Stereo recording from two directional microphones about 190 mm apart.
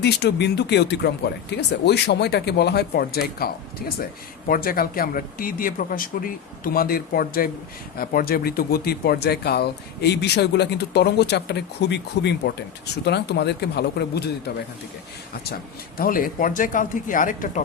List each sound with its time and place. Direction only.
0.0 s speech: 60° left (ahead or behind)
16.0 s speech: 50° left (ahead or behind)